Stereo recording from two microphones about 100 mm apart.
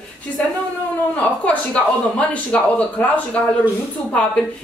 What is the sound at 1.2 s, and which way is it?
A woman's voice, 15° left (ahead or behind).